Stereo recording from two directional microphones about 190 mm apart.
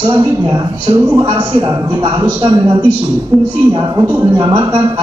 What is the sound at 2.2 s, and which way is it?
Speech, 10° right (ahead or behind).